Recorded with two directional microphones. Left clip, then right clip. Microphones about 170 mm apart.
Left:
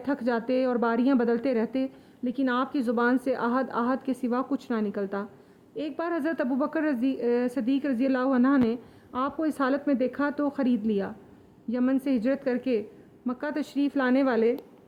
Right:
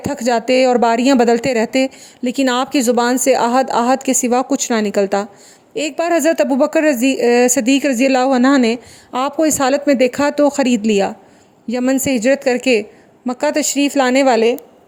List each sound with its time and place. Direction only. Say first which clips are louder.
0.0 s speech: right 11 dB; 40° right (ahead or behind)